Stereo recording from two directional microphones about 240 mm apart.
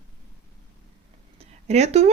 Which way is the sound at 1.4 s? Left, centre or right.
Right.